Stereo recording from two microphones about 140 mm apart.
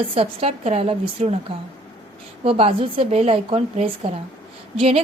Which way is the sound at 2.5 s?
40° right (ahead or behind).